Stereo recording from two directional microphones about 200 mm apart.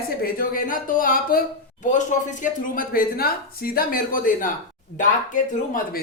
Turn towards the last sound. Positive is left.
turn(degrees=40)  # may be behind; listen again after turning